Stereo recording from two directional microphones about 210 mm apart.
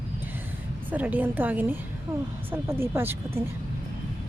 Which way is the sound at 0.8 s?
10° right (ahead or behind).